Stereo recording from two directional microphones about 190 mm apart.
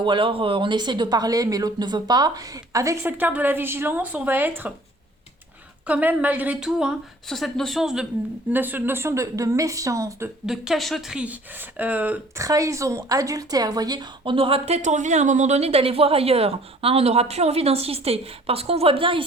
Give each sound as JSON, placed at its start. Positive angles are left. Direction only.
{"t": 0.0, "sound": "speech", "side_deg": -25}
{"t": 5.8, "sound": "a woman's voice", "side_deg": -10}
{"t": 10.4, "sound": "speech", "side_deg": 0}